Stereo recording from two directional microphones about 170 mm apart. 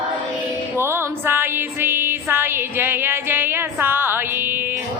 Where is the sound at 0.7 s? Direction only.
15° right (ahead or behind).